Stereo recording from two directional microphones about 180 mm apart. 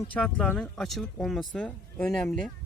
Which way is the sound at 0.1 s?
5° left (ahead or behind).